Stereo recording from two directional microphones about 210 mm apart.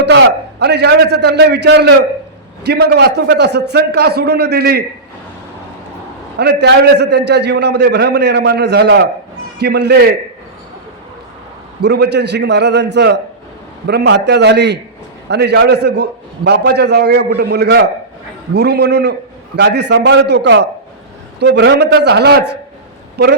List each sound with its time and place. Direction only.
0.0 s a man's voice: 55° right (ahead or behind)
6.3 s a man's voice: 50° right (ahead or behind)
11.8 s a man's voice: 50° right (ahead or behind)